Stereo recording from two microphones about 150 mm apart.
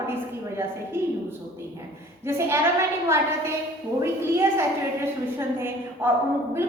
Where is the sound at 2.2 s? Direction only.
15° right (ahead or behind).